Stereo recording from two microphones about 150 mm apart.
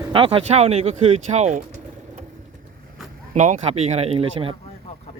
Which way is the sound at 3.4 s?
55° right (ahead or behind).